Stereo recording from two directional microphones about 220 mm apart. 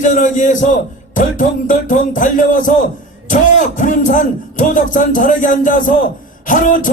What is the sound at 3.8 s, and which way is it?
Speech, 35° left (ahead or behind).